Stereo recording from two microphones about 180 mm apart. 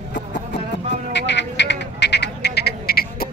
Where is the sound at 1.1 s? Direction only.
75° left (ahead or behind).